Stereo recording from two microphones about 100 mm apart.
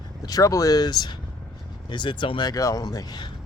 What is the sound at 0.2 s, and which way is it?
Speech, 40° left (ahead or behind).